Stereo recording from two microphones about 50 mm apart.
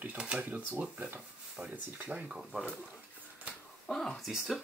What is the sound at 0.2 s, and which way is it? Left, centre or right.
Speech, right.